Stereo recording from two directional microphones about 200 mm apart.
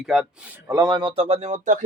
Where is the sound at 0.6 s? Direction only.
15° right (ahead or behind); by 1.8 s 40° right (ahead or behind).